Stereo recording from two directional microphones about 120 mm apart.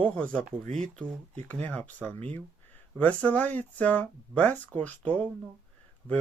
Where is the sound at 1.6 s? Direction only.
15° left (ahead or behind).